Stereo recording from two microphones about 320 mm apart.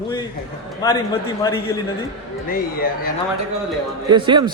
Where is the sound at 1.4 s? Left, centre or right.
Centre.